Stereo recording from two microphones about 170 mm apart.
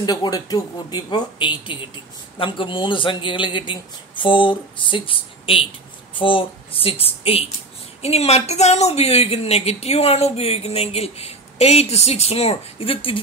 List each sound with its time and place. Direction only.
0.0 s speech: 25° left (ahead or behind)